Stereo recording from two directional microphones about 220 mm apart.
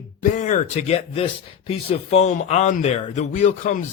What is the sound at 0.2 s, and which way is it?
Speech, 35° left (ahead or behind).